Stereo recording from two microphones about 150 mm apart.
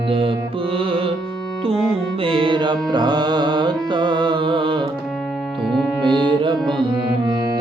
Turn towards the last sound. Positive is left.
turn(degrees=-30)  # may be behind; listen again after turning